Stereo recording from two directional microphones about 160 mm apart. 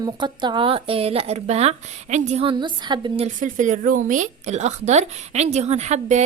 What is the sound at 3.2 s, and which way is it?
A woman's voice, 50° right (ahead or behind).